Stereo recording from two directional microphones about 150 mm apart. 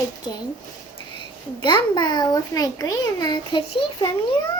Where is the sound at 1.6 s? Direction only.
30° left (ahead or behind).